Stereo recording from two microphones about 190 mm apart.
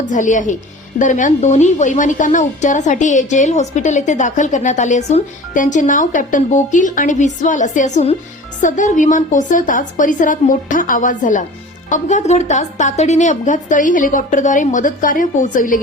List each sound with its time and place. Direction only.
0.0 s a woman's voice: 40° left (ahead or behind)